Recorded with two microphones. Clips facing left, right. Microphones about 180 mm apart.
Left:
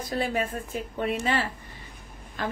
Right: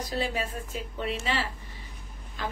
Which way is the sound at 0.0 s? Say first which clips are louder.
Left 3 dB; 50° left (ahead or behind).